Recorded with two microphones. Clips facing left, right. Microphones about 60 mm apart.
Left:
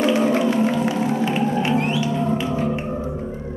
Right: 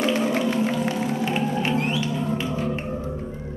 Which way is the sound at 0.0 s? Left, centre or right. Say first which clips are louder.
Left 4 dB; centre.